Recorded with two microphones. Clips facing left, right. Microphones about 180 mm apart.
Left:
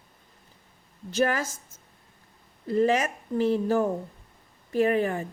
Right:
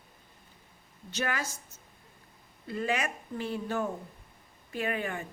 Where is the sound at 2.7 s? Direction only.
40° left (ahead or behind).